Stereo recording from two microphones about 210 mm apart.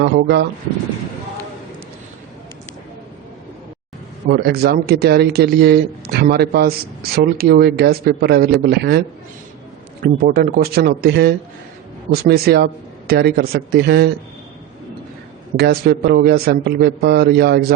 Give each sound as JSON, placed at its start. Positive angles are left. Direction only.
{"t": 0.0, "sound": "speech", "side_deg": -55}
{"t": 4.3, "sound": "speech", "side_deg": -50}
{"t": 15.5, "sound": "speech", "side_deg": -50}